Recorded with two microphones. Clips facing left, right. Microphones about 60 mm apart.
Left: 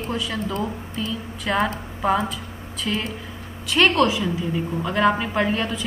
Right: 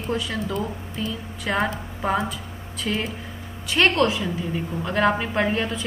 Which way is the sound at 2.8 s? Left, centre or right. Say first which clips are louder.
Even; right.